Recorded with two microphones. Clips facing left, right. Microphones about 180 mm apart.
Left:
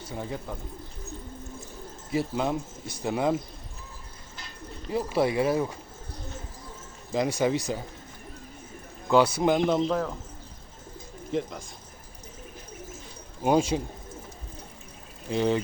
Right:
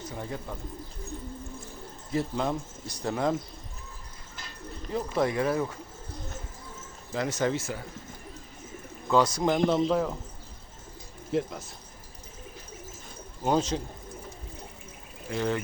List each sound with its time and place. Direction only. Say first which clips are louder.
0.0 s speech: left 2 dB; 15° left (ahead or behind)
2.1 s a man's voice: left 1 dB; 5° left (ahead or behind)
2.5 s a man's voice: left 2 dB; 25° left (ahead or behind)
3.0 s speech: left 2 dB; 10° left (ahead or behind)
4.9 s speech: left 2 dB; 10° left (ahead or behind)
7.1 s speech: left 3 dB; 15° left (ahead or behind)
9.0 s speech: left 3 dB; 5° left (ahead or behind)
9.6 s a man's voice: even; 5° right (ahead or behind)
11.3 s a man's voice: right 1 dB; 5° right (ahead or behind)
13.4 s speech: left 3 dB; 10° left (ahead or behind)
15.3 s a man's voice: left 4 dB; 20° left (ahead or behind)